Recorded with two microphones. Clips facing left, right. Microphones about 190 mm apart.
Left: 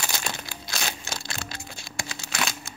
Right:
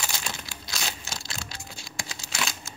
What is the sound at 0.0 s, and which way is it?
Crumpling, 55° left (ahead or behind).